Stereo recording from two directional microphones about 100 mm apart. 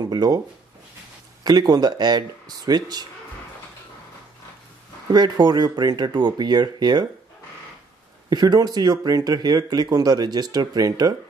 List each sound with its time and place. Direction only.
0.1 s speech: 40° right (ahead or behind)
1.4 s speech: 40° right (ahead or behind)
5.1 s speech: 45° right (ahead or behind)
8.3 s speech: 40° right (ahead or behind)